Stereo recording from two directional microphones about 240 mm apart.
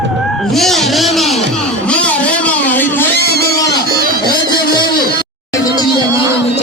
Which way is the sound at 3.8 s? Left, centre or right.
Right.